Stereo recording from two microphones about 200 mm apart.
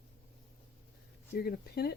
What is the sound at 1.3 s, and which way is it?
Speech, 50° left (ahead or behind).